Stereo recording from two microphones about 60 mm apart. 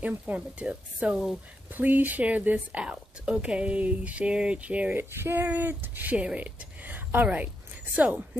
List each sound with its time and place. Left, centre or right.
0.0 s speech: right
4.9 s speech: right